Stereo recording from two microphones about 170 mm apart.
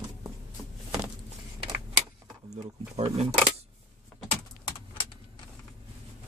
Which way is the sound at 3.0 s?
35° right (ahead or behind).